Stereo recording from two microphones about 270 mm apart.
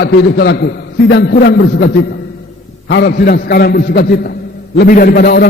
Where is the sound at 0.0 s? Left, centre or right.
Left.